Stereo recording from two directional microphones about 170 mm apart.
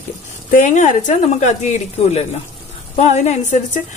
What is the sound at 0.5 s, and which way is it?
A woman's voice, 45° left (ahead or behind).